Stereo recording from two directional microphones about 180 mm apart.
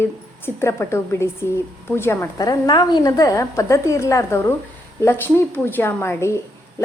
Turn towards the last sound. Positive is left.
turn(degrees=15)  # may be behind; listen again after turning